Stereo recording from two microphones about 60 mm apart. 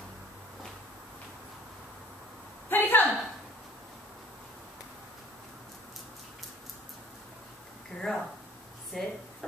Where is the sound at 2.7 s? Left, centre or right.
Left.